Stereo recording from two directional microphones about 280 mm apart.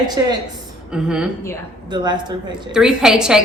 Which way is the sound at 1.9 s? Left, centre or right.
Centre.